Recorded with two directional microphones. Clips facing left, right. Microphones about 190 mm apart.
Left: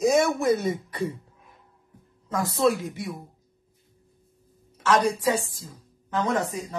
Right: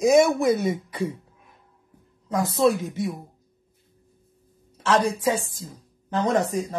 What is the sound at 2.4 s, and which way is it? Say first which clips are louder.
Speech: right 2 dB; 20° right (ahead or behind).